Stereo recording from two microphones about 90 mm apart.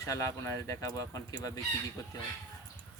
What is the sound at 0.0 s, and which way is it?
Speech, 40° left (ahead or behind).